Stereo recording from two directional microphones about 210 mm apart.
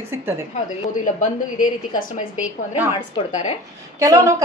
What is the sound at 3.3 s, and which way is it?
Speech, 35° left (ahead or behind).